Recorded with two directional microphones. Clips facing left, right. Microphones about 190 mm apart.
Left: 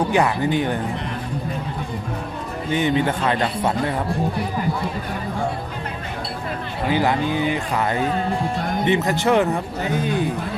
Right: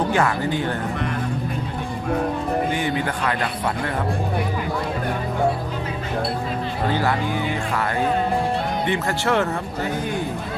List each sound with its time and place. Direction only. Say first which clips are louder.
0.1 s speech: left 2 dB; 15° left (ahead or behind)
2.7 s speech: left 4 dB; 20° left (ahead or behind)
6.9 s speech: left 5 dB; 20° left (ahead or behind)